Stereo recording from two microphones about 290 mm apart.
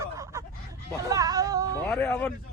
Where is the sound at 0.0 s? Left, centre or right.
Centre.